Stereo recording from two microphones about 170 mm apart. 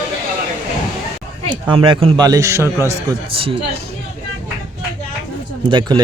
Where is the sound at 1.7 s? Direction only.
30° right (ahead or behind).